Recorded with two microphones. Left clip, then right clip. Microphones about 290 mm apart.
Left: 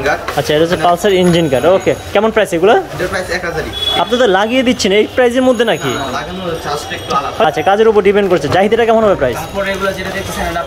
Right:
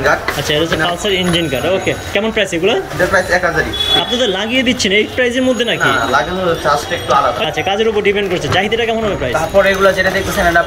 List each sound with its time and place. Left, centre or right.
0.5 s speech: centre
4.1 s speech: centre
7.1 s speech: centre